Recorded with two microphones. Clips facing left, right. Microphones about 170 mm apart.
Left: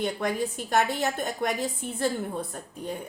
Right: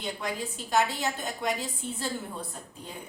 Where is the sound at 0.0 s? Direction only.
55° left (ahead or behind).